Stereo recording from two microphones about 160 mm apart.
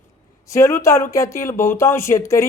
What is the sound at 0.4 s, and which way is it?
A man's voice, 20° left (ahead or behind).